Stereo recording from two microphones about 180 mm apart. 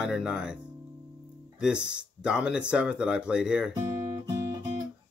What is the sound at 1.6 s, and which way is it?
Speech, 5° right (ahead or behind).